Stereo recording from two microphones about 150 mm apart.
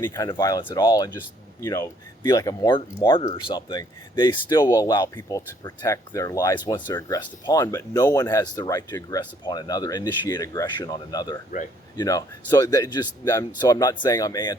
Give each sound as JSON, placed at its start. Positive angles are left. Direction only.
{"t": 0.0, "sound": "speech", "side_deg": 20}
{"t": 2.2, "sound": "speech", "side_deg": 25}